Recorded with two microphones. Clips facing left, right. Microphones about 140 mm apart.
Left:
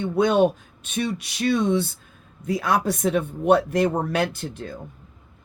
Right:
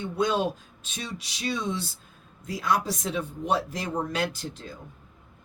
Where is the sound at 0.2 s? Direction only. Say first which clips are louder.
Left 7 dB; 60° left (ahead or behind).